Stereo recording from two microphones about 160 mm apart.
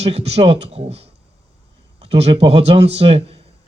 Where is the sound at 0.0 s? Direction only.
40° right (ahead or behind).